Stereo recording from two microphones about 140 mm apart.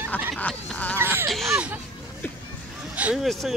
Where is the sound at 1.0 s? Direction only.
15° right (ahead or behind).